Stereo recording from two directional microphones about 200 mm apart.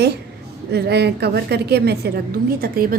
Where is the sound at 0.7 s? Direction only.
55° right (ahead or behind).